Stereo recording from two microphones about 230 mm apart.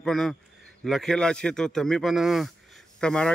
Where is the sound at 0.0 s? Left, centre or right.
Centre.